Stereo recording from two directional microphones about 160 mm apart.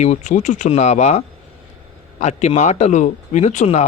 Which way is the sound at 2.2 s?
45° left (ahead or behind).